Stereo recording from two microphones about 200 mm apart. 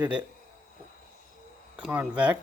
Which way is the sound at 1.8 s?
5° right (ahead or behind).